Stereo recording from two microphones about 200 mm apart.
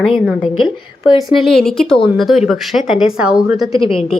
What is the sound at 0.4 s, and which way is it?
Speech, 25° left (ahead or behind).